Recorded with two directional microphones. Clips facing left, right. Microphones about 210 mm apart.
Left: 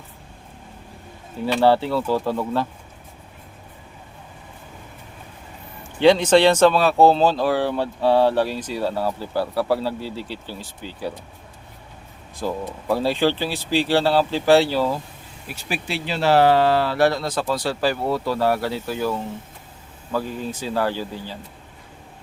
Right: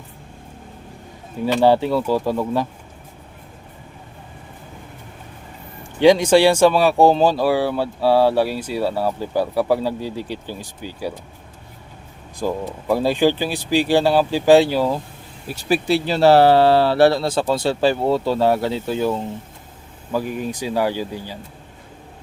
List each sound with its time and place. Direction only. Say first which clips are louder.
1.6 s speech: right 2 dB; 15° right (ahead or behind)
6.0 s speech: right 2 dB; 10° right (ahead or behind)
12.9 s speech: right 3 dB; 15° right (ahead or behind)
15.4 s speech: right 10 dB; 40° right (ahead or behind); by 21.3 s 15° right (ahead or behind)